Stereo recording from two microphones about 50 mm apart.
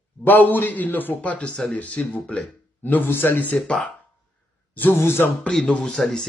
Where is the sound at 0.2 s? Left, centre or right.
Left.